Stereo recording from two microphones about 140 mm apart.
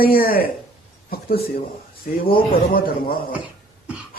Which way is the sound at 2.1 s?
90° left.